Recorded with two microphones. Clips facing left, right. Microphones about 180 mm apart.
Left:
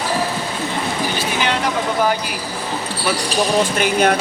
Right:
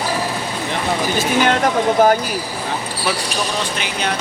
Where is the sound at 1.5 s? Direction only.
45° right (ahead or behind).